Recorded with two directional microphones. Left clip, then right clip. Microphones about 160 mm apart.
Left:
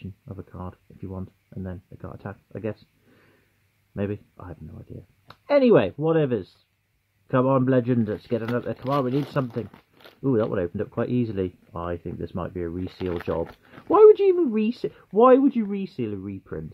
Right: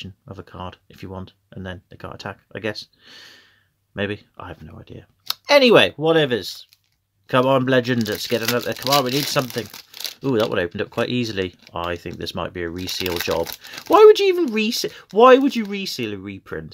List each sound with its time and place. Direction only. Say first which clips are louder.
0.2 s speech: right 3 dB; 25° right (ahead or behind)
3.9 s speech: right 5 dB; 15° right (ahead or behind)
5.3 s speech: right 5 dB; 15° right (ahead or behind); by 9.1 s 30° right (ahead or behind)
9.3 s speech: right 6 dB; 15° right (ahead or behind)
10.2 s speech: right 3 dB; 30° right (ahead or behind)
10.5 s speech: right 4 dB; 20° right (ahead or behind)